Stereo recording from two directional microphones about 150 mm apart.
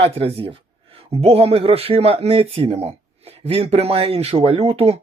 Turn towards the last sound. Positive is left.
turn(degrees=-40)  # may be behind; listen again after turning